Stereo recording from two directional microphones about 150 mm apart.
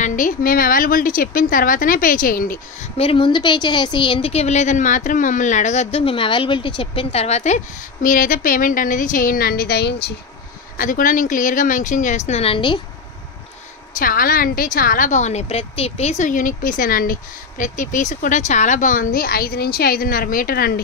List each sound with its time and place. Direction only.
0.0 s a woman's voice: 60° left (ahead or behind)
2.8 s a woman's voice: 40° left (ahead or behind); by 9.9 s 90° left
10.8 s a woman's voice: 65° left (ahead or behind); by 12.8 s 35° left (ahead or behind)
13.9 s a woman's voice: 70° left (ahead or behind); by 20.8 s 85° left